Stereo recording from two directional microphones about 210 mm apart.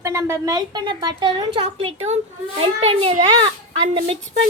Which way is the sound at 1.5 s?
30° right (ahead or behind).